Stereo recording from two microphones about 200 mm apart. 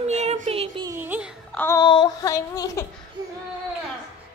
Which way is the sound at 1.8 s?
20° left (ahead or behind).